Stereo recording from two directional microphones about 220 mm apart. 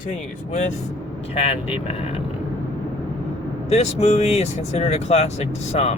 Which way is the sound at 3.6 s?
30° left (ahead or behind).